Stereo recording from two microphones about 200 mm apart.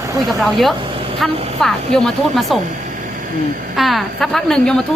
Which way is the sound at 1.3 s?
30° right (ahead or behind).